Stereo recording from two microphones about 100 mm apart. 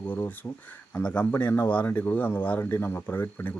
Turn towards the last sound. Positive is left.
turn(degrees=20)  # may be behind; listen again after turning